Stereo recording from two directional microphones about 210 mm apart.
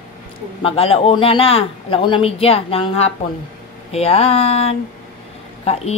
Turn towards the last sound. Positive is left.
turn(degrees=30)  # may be behind; listen again after turning